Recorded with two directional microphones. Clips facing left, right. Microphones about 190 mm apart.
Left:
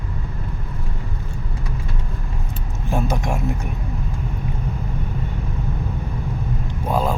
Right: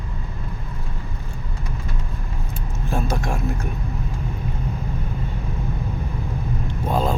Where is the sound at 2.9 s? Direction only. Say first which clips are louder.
Left 2 dB; 20° left (ahead or behind).